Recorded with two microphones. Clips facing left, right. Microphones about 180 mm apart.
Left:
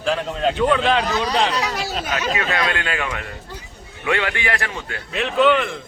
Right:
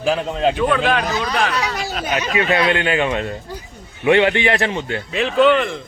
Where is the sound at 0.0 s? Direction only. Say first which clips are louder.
Right 3 dB; 5° right (ahead or behind).